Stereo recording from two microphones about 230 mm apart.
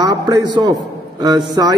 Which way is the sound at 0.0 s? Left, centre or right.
Centre.